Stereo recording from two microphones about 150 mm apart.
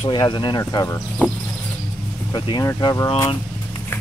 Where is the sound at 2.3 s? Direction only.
30° left (ahead or behind).